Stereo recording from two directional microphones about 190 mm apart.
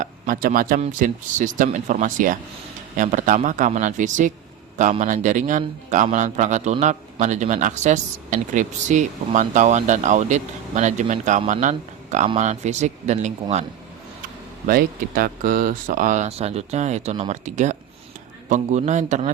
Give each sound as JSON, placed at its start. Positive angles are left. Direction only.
{"t": 0.0, "sound": "a man's voice", "side_deg": -45}
{"t": 14.7, "sound": "a man's voice", "side_deg": -50}